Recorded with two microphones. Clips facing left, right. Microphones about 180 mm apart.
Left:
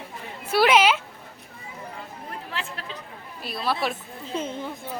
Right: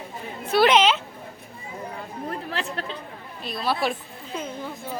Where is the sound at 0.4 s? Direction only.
10° left (ahead or behind).